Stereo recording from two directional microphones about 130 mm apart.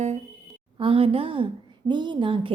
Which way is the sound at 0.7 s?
45° right (ahead or behind).